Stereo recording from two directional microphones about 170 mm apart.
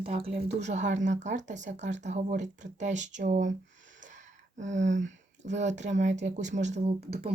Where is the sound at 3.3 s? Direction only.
45° right (ahead or behind).